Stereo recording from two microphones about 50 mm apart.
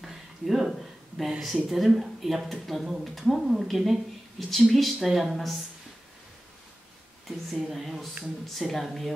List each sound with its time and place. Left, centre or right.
0.0 s a sound: centre
1.4 s speech: centre
7.6 s speech: centre